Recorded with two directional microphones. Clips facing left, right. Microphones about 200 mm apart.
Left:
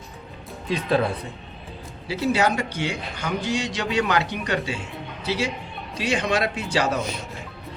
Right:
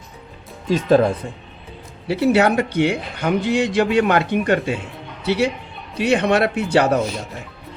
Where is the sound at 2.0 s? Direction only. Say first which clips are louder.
Right 6 dB; 60° right (ahead or behind).